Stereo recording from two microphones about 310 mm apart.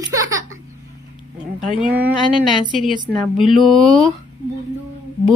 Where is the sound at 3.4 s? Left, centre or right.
Centre.